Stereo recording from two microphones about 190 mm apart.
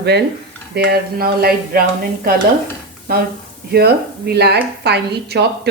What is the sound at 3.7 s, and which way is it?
Speech, 55° right (ahead or behind).